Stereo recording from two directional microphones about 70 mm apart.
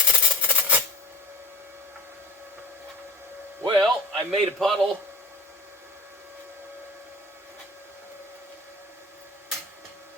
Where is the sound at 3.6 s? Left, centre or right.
Right.